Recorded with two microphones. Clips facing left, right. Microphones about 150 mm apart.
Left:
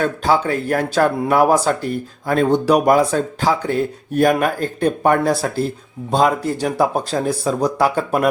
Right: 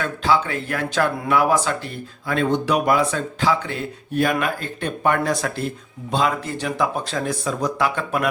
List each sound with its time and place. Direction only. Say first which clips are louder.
0.0 s speech: left 3 dB; 40° left (ahead or behind)